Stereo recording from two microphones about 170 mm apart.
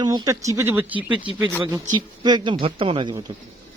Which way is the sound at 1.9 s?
25° right (ahead or behind).